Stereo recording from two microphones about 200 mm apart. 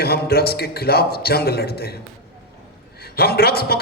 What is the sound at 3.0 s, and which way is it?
Speech, 50° left (ahead or behind).